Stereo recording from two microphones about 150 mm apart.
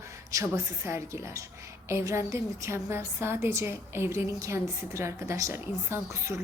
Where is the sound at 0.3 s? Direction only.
20° right (ahead or behind).